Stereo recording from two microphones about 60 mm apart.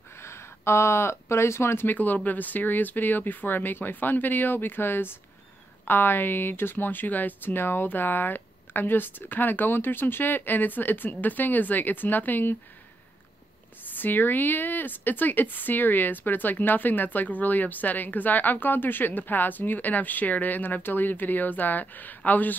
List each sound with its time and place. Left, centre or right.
0.2 s speech: left
1.9 s speech: left
13.9 s speech: left